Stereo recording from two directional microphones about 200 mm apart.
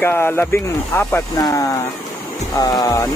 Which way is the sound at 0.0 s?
10° left (ahead or behind).